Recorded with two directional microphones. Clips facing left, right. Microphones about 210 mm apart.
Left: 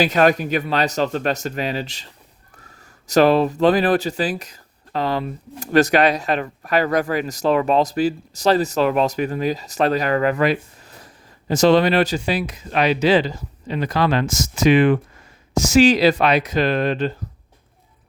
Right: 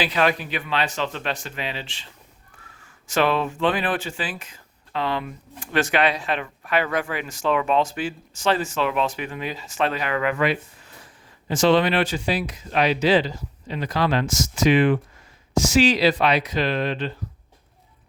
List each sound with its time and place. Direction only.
0.0 s speech: 45° left (ahead or behind)